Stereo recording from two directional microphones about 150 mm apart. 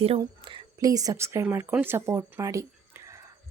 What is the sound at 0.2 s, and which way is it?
A woman's voice, 30° right (ahead or behind).